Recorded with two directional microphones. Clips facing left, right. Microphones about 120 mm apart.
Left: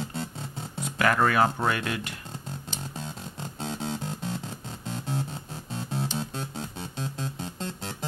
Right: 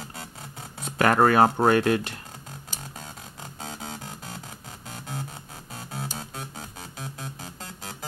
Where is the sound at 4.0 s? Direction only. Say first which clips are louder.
Left 6 dB; 30° left (ahead or behind).